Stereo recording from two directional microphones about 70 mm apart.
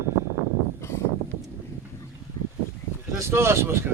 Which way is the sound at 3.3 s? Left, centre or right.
Right.